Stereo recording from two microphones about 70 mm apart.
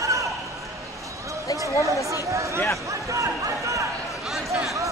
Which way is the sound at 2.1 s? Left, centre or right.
Right.